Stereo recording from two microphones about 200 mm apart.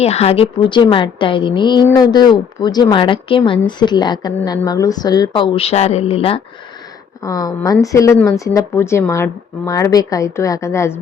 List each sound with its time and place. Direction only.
0.0 s a woman's voice: 30° left (ahead or behind)
7.3 s a woman's voice: 20° left (ahead or behind)